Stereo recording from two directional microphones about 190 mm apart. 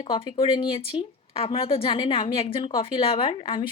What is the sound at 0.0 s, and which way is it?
A woman's voice, 30° left (ahead or behind).